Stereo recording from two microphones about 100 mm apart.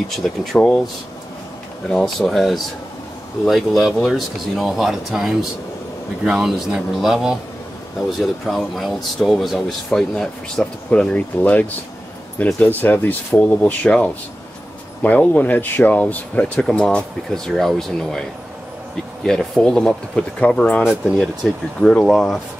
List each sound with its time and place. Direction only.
0.1 s speech: 5° left (ahead or behind)
1.9 s speech: 5° left (ahead or behind)
19.2 s speech: 5° left (ahead or behind)